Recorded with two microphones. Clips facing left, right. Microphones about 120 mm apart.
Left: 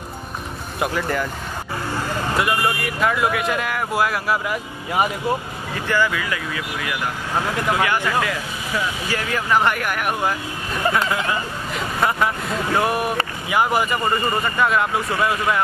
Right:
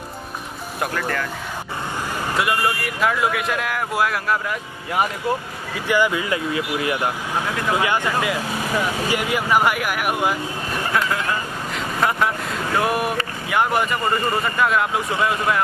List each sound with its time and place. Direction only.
0.7 s speech: 5° left (ahead or behind)
2.3 s speech: centre (ahead or behind)
5.8 s speech: 15° right (ahead or behind)
11.7 s vehicle: centre (ahead or behind)
12.7 s speech: centre (ahead or behind)